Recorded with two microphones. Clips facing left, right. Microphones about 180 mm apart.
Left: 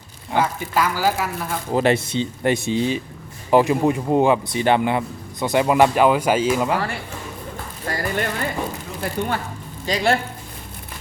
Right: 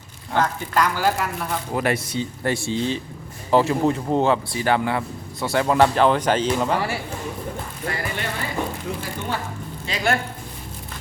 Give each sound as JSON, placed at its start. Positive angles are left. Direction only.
{"t": 0.3, "sound": "speech", "side_deg": 5}
{"t": 1.7, "sound": "speech", "side_deg": 25}
{"t": 6.7, "sound": "speech", "side_deg": -10}
{"t": 7.9, "sound": "a sound", "side_deg": 40}
{"t": 9.2, "sound": "speech", "side_deg": 55}
{"t": 9.8, "sound": "speech", "side_deg": 35}